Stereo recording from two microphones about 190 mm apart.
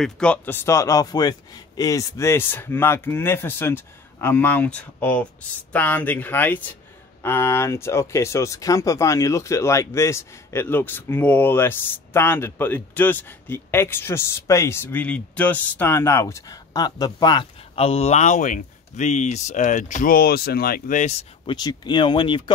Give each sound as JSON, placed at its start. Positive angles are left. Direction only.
{"t": 0.0, "sound": "speech", "side_deg": 5}
{"t": 21.5, "sound": "speech", "side_deg": 20}